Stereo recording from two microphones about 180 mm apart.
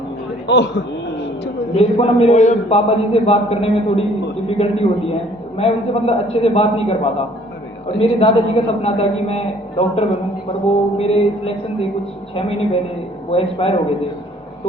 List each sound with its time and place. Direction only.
0.4 s a man's voice: 75° left (ahead or behind)
1.7 s a man's voice: 35° left (ahead or behind)